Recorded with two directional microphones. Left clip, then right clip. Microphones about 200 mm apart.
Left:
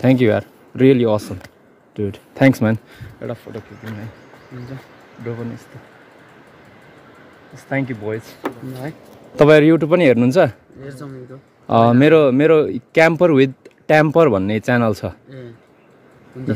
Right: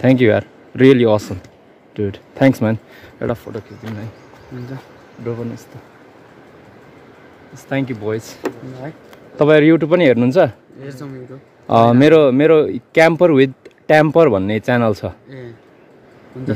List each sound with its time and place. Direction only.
0.0 s speech: centre (ahead or behind)
2.4 s speech: 10° left (ahead or behind)
3.2 s speech: 45° right (ahead or behind)
7.7 s speech: centre (ahead or behind)
9.6 s speech: 5° left (ahead or behind)
10.8 s speech: 10° right (ahead or behind)
11.6 s speech: 5° left (ahead or behind)